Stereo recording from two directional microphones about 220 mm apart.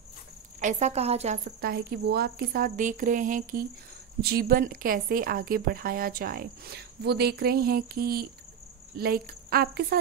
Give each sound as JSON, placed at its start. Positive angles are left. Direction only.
{"t": 0.6, "sound": "speech", "side_deg": -35}
{"t": 1.6, "sound": "speech", "side_deg": -45}